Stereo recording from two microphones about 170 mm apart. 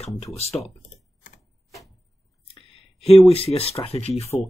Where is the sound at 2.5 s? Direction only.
35° left (ahead or behind).